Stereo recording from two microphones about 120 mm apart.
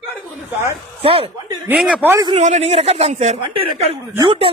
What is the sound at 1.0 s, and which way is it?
Speech, 50° right (ahead or behind).